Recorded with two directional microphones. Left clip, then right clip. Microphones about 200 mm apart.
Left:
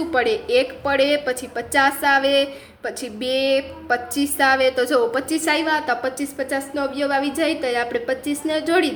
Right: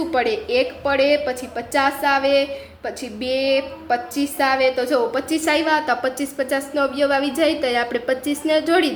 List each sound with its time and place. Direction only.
0.1 s a woman's voice: 5° left (ahead or behind)